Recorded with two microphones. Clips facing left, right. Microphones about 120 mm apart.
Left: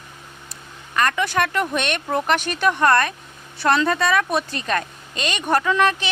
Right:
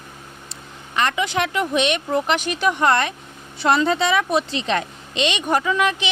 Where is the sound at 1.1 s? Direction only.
20° right (ahead or behind).